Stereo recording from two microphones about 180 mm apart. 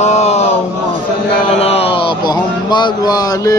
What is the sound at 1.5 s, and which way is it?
Speech, 35° left (ahead or behind).